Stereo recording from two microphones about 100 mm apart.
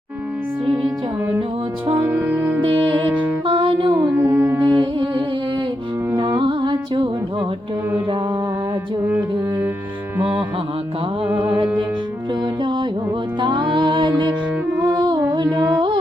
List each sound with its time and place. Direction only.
2.0 s music: 20° right (ahead or behind)
2.6 s music: 65° right (ahead or behind)
3.9 s mantra: 20° right (ahead or behind)
4.6 s music: 55° right (ahead or behind)
6.4 s music: 55° right (ahead or behind)
9.0 s music: 20° right (ahead or behind)
12.3 s music: 50° right (ahead or behind)